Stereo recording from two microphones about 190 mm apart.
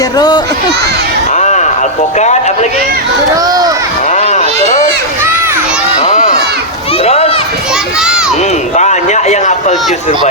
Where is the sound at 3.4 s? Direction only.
20° right (ahead or behind).